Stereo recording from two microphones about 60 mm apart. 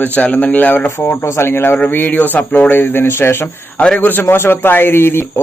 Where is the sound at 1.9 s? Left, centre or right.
Left.